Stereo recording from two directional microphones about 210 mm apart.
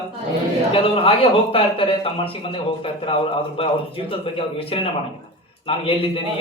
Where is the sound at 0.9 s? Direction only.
25° left (ahead or behind).